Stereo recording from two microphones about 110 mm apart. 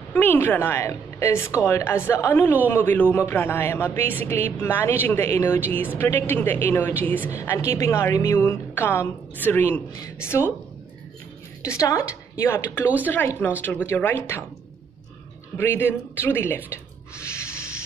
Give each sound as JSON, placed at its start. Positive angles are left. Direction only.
{"t": 0.1, "sound": "a woman's voice", "side_deg": 15}
{"t": 11.6, "sound": "a woman's voice", "side_deg": 30}
{"t": 15.5, "sound": "a woman's voice", "side_deg": 20}
{"t": 17.2, "sound": "rub", "side_deg": 25}